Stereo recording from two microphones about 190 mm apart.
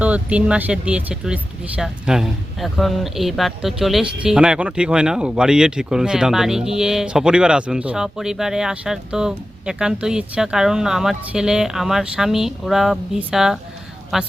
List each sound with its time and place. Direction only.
0.0 s speech: 5° right (ahead or behind)